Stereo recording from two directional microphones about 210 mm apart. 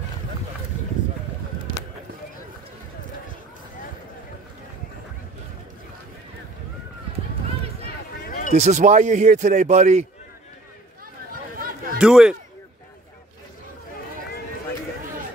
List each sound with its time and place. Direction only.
8.3 s basketball bounce: 35° left (ahead or behind)
8.5 s a man's voice: 35° right (ahead or behind)
11.6 s a sound: 45° right (ahead or behind)
12.0 s a man's voice: 5° right (ahead or behind)